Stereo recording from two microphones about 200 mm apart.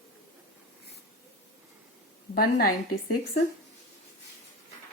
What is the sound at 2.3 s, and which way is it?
Speech, 50° left (ahead or behind).